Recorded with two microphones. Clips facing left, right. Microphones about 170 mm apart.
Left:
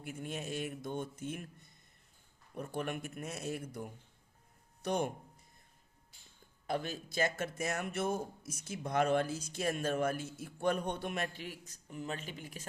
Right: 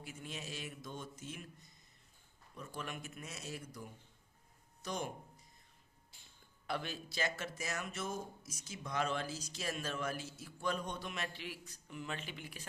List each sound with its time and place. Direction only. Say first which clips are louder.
0.0 s speech: left 6 dB; 55° left (ahead or behind)
6.7 s speech: left 4 dB; 45° left (ahead or behind)